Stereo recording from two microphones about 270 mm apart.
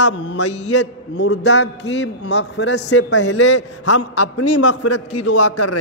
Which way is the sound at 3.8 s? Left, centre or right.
Left.